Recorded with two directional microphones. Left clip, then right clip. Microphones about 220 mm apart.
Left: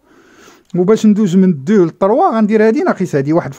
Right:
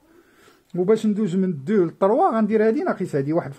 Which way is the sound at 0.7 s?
40° left (ahead or behind).